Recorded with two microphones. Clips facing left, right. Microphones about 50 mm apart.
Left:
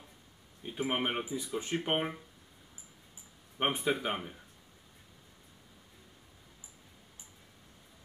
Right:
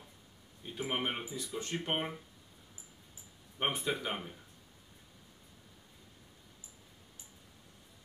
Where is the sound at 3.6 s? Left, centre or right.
Centre.